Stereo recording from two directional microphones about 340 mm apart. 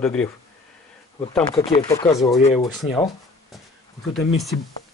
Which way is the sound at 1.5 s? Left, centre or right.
Centre.